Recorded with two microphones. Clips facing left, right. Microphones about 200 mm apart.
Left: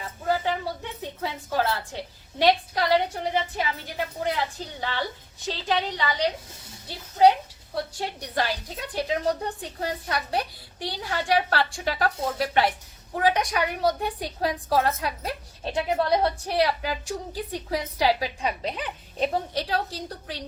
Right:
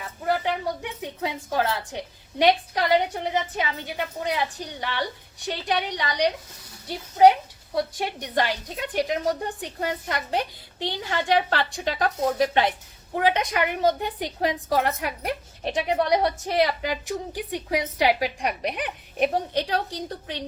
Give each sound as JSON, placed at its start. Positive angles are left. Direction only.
{"t": 0.4, "sound": "a woman's voice", "side_deg": -15}
{"t": 7.9, "sound": "a woman's voice", "side_deg": -20}